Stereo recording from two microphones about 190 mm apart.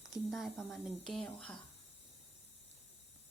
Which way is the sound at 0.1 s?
Centre (ahead or behind).